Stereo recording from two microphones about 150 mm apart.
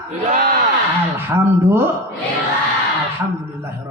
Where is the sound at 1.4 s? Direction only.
15° right (ahead or behind).